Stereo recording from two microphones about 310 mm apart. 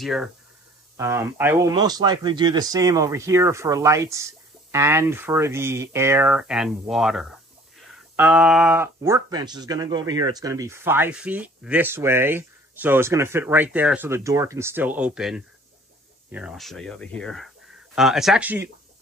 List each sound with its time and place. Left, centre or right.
0.0 s speech: centre